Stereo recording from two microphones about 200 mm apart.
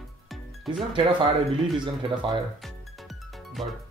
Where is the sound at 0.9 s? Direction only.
25° right (ahead or behind).